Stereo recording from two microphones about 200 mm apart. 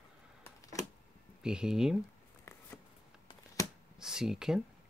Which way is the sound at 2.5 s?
15° left (ahead or behind).